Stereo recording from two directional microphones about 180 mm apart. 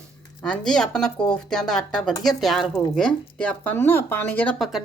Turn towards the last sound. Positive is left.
turn(degrees=5)  # may be behind; listen again after turning